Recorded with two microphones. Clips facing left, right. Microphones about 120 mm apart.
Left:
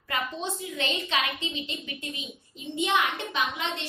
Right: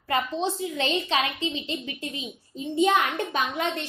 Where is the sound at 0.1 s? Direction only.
35° right (ahead or behind).